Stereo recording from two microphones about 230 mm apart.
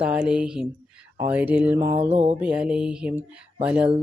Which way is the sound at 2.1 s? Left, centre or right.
Right.